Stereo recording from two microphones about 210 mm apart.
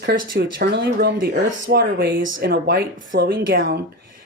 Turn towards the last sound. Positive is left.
turn(degrees=-45)  # may be behind; listen again after turning